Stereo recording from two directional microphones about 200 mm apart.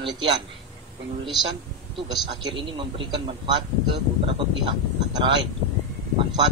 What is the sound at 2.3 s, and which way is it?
A man's voice, 20° right (ahead or behind).